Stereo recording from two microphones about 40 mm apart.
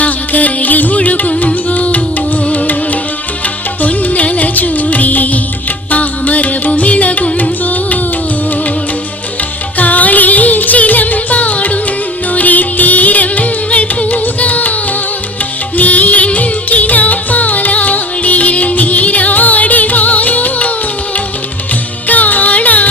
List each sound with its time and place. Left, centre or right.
0.0 s music: left
9.7 s music: left
15.8 s music: left
22.0 s music: left